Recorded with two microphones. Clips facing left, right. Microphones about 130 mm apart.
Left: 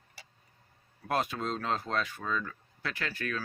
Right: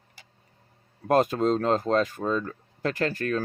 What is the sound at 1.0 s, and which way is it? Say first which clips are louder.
Speech: right 10 dB; 45° right (ahead or behind).